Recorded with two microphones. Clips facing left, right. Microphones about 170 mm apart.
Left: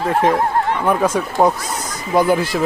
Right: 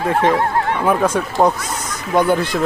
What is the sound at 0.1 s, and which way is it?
Speech, centre (ahead or behind).